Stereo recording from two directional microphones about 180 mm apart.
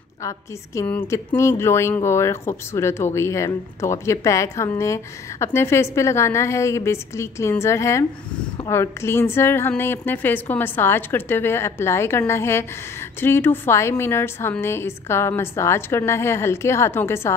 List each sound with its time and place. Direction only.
0.7 s speech: 15° left (ahead or behind)